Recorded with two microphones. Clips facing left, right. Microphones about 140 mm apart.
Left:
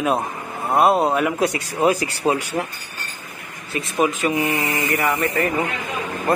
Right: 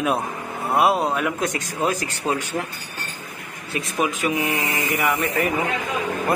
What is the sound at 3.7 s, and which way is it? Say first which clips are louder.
A man's voice: left 3 dB; centre (ahead or behind).